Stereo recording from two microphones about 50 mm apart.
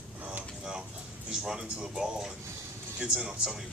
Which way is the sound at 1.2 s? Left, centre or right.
Centre.